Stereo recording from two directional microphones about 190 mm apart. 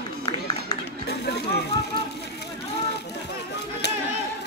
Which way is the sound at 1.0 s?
60° left (ahead or behind).